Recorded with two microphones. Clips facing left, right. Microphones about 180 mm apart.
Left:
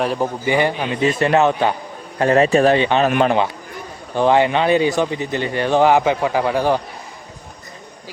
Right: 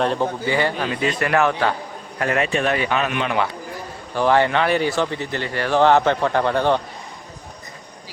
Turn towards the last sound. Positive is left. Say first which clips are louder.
# left 1 dB
turn(degrees=5)  # may be behind; listen again after turning